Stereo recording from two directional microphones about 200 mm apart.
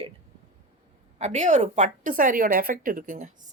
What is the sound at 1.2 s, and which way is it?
A woman's voice, 35° right (ahead or behind).